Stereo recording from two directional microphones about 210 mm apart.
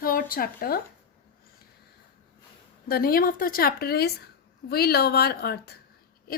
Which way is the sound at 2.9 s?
45° left (ahead or behind).